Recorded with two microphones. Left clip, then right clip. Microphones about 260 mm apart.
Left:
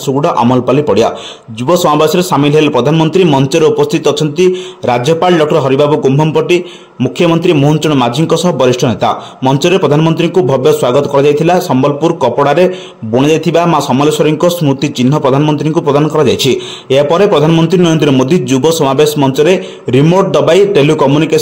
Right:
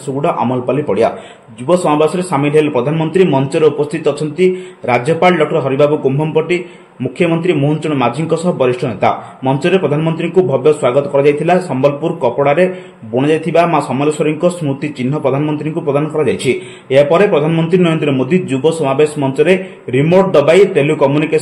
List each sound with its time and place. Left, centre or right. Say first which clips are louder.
0.2 s speech: left 4 dB; left